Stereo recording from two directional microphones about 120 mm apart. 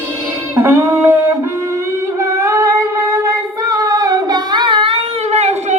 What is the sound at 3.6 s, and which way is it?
Singing, 30° right (ahead or behind).